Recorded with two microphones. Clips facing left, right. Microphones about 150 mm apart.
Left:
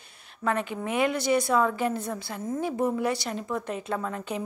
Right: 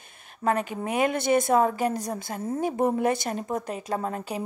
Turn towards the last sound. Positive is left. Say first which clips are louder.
# right 1 dB
turn(degrees=-35)  # may be behind; listen again after turning